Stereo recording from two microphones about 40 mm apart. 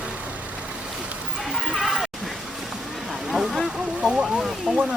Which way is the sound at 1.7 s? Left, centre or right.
Centre.